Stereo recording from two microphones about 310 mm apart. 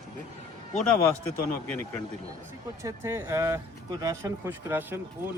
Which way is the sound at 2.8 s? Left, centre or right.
Centre.